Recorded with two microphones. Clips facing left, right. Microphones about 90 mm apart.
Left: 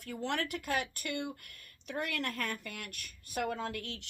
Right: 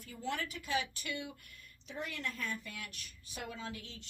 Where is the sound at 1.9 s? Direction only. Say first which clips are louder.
Left 5 dB; 70° left (ahead or behind).